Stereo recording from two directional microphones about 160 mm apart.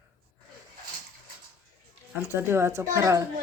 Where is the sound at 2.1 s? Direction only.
15° right (ahead or behind).